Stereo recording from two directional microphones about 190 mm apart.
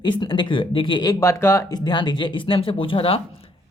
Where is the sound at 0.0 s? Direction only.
25° left (ahead or behind).